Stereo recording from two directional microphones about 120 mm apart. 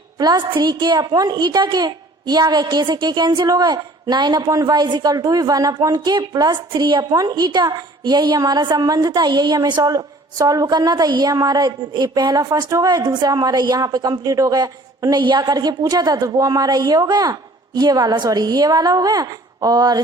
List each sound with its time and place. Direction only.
0.2 s a woman's voice: 35° right (ahead or behind)